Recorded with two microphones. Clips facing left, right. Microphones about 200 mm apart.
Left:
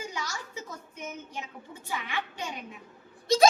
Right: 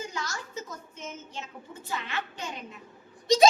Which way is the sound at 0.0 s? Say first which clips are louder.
Right 1 dB; 10° left (ahead or behind).